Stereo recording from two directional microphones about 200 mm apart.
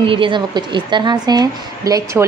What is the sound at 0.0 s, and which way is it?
A woman's voice, 25° right (ahead or behind).